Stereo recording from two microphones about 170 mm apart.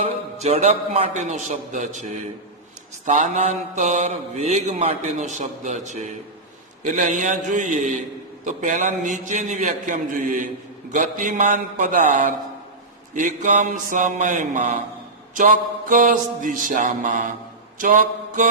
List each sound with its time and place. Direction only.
0.3 s a man's voice: 40° right (ahead or behind)
3.1 s mantra: 45° right (ahead or behind)